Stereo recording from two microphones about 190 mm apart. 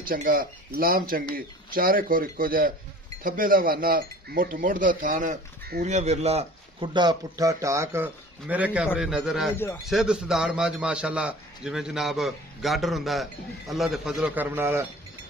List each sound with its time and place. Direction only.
0.0 s a man's voice: 50° right (ahead or behind); by 14.8 s 10° right (ahead or behind)